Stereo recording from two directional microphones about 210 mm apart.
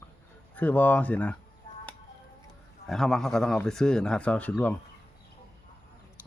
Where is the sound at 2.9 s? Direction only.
Centre (ahead or behind).